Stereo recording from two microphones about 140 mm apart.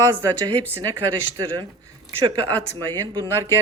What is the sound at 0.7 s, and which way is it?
Speech, 25° right (ahead or behind).